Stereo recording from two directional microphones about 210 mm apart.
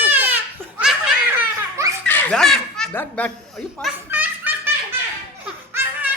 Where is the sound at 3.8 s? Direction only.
5° right (ahead or behind).